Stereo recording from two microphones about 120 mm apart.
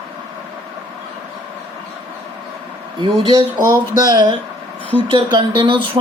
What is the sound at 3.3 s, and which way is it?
Speech, 35° right (ahead or behind).